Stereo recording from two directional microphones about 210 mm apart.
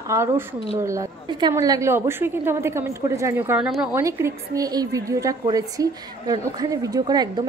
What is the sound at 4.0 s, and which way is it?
A woman's voice, 15° right (ahead or behind).